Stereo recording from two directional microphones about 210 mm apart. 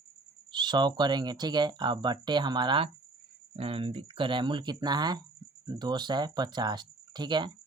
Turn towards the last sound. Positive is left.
turn(degrees=-20)  # may be behind; listen again after turning